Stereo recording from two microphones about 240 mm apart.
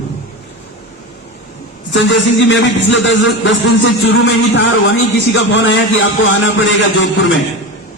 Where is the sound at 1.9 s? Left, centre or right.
Left.